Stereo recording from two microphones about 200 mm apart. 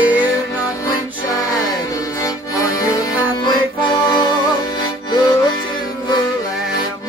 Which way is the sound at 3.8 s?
20° left (ahead or behind).